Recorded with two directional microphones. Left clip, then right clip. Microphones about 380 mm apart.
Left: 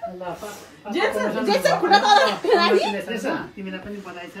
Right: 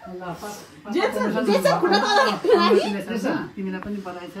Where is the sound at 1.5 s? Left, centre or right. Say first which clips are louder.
Even; left.